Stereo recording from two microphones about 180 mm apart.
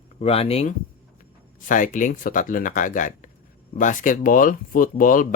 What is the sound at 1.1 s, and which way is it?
Speech, 45° left (ahead or behind).